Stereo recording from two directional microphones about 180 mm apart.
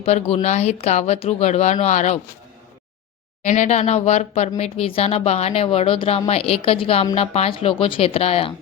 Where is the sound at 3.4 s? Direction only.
40° left (ahead or behind).